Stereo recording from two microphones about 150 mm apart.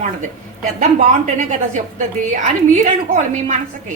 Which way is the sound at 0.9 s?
55° right (ahead or behind).